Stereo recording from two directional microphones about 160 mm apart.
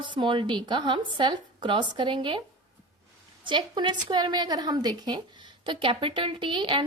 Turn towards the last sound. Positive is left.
turn(degrees=-30)  # may be behind; listen again after turning